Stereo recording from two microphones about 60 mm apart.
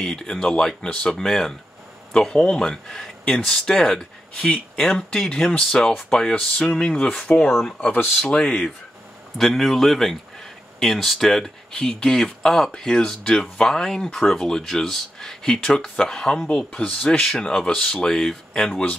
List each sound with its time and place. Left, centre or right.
0.0 s speech: centre
9.4 s a man's voice: centre